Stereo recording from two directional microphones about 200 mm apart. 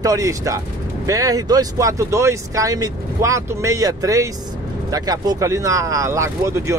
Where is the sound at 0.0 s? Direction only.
15° right (ahead or behind).